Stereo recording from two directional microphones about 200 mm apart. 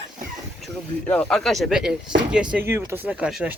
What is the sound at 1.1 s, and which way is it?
Speech, 5° left (ahead or behind).